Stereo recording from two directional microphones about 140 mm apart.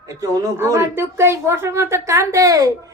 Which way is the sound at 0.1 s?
25° right (ahead or behind).